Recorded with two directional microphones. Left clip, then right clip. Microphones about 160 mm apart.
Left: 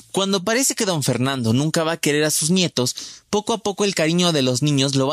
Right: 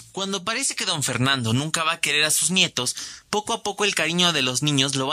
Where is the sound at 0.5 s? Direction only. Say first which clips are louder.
Left 5 dB; 40° left (ahead or behind).